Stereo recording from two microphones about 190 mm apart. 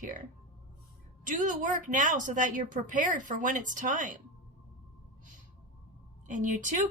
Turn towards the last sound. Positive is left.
turn(degrees=-40)  # may be behind; listen again after turning